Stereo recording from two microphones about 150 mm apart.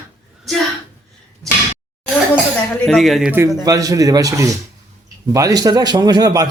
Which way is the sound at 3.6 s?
25° right (ahead or behind).